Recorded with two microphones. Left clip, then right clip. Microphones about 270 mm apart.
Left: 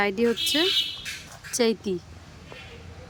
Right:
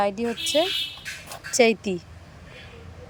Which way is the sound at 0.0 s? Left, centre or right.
Centre.